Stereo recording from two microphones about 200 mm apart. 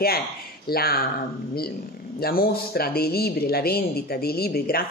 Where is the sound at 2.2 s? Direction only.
50° left (ahead or behind).